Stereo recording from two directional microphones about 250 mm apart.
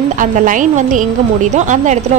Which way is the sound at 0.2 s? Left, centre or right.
Right.